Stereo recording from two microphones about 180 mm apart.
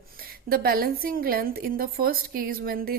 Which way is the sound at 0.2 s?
55° right (ahead or behind).